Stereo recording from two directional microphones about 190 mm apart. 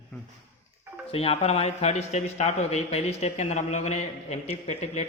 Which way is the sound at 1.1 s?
30° left (ahead or behind).